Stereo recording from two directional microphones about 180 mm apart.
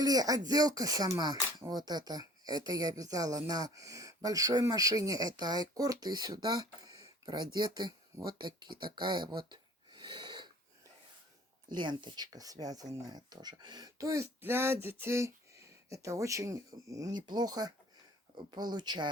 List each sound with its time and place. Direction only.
0.0 s speech: 20° right (ahead or behind)
9.5 s a sound: 25° right (ahead or behind)
11.7 s speech: 25° right (ahead or behind)